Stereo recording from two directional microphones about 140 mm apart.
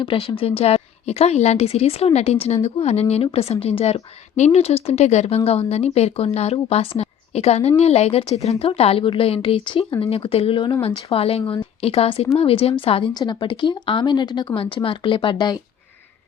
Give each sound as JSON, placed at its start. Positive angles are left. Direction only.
{"t": 0.0, "sound": "a woman's voice", "side_deg": 40}